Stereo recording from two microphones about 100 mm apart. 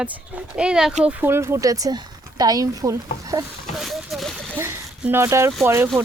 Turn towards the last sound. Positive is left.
turn(degrees=-25)  # may be behind; listen again after turning